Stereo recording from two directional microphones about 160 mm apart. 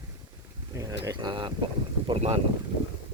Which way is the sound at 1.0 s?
25° right (ahead or behind).